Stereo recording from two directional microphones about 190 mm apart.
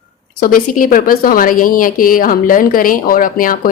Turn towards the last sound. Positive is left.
turn(degrees=45)  # may be behind; listen again after turning